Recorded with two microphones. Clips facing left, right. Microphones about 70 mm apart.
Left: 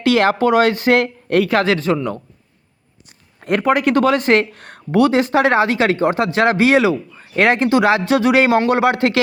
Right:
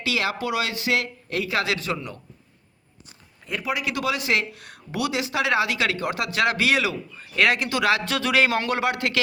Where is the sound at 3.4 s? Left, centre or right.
Left.